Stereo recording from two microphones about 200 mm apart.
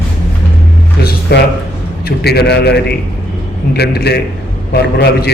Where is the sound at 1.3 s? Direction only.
55° left (ahead or behind).